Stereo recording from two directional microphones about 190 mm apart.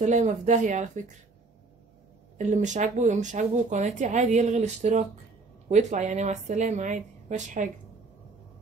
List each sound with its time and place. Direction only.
0.0 s speech: 40° right (ahead or behind)
2.3 s speech: 40° right (ahead or behind)